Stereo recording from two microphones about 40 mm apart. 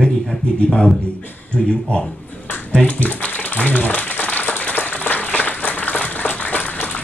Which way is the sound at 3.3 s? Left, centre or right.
Left.